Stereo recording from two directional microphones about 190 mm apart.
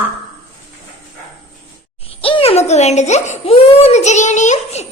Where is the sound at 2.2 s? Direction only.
30° left (ahead or behind).